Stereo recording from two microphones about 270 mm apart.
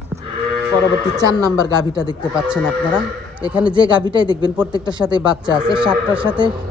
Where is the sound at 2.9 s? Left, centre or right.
Centre.